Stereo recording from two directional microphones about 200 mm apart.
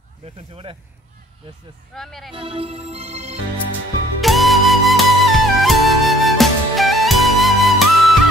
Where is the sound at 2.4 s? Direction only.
30° right (ahead or behind).